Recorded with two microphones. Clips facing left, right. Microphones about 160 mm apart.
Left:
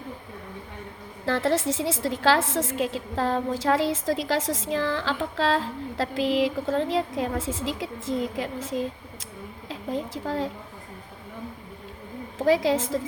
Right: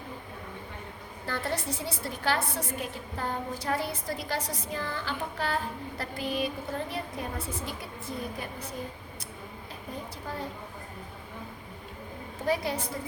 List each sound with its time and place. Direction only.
1.2 s a woman's voice: 90° left
12.4 s a woman's voice: 90° left